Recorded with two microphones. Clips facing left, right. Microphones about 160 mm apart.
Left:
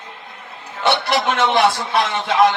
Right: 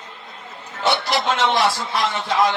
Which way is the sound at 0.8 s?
60° left (ahead or behind).